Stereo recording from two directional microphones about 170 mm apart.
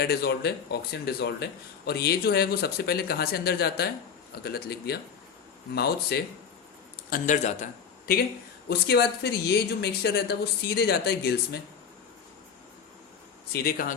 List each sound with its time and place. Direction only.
0.0 s a woman's voice: 65° left (ahead or behind)
7.1 s speech: 45° left (ahead or behind)
8.7 s a woman's voice: 75° left (ahead or behind)
13.5 s speech: 60° left (ahead or behind)